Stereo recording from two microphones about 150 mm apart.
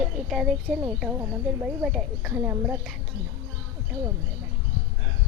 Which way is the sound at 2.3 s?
15° right (ahead or behind).